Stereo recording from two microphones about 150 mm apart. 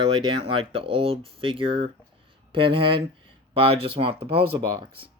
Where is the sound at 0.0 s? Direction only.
35° right (ahead or behind).